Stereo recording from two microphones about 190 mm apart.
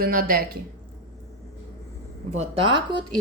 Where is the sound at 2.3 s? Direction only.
25° right (ahead or behind).